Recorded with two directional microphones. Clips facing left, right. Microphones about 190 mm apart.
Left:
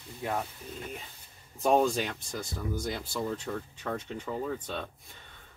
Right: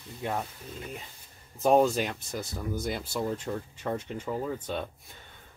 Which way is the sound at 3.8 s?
20° right (ahead or behind).